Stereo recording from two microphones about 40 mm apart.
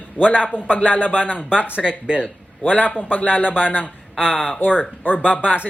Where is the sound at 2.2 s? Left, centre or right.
Left.